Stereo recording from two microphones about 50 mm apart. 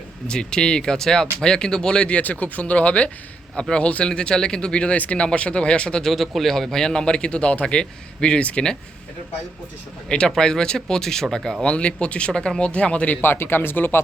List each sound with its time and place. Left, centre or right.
0.3 s speech: centre
6.1 s speech: centre; by 8.7 s left
10.1 s speech: centre
11.6 s speech: left
13.2 s speech: left